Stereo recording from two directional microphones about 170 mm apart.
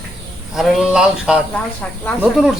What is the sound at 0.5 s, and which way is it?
Speech, 5° right (ahead or behind).